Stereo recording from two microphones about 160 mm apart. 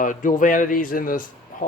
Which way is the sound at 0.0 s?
55° left (ahead or behind).